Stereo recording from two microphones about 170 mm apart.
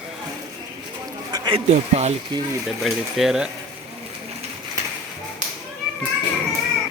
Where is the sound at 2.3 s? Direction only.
25° right (ahead or behind).